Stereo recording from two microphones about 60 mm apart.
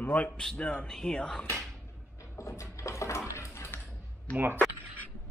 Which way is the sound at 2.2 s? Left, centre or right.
Left.